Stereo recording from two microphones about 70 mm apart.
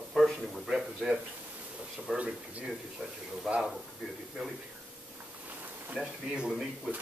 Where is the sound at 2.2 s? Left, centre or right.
Centre.